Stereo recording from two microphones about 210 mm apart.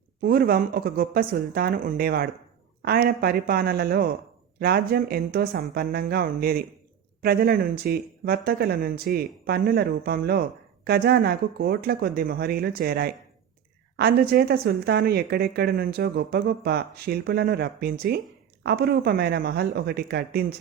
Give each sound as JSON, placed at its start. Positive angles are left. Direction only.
{"t": 0.2, "sound": "speech", "side_deg": -45}